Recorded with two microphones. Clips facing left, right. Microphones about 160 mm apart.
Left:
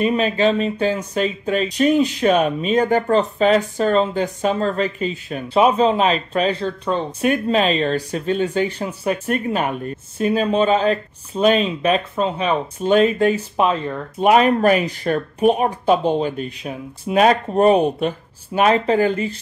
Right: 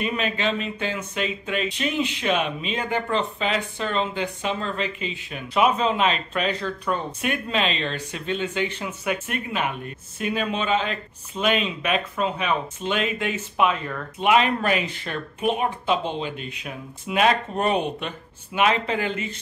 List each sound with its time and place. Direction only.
0.0 s speech: 35° left (ahead or behind)
14.2 s speech: 40° left (ahead or behind)